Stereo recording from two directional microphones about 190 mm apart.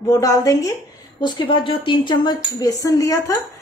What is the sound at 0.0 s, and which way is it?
A woman's voice, 20° left (ahead or behind).